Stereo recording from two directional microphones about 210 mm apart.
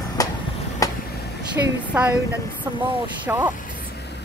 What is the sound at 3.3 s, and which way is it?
Speech, 10° right (ahead or behind).